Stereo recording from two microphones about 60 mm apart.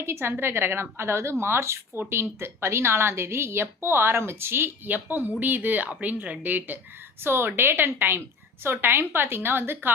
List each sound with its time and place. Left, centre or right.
0.0 s a woman's voice: right
4.9 s a woman's voice: right
7.3 s a woman's voice: right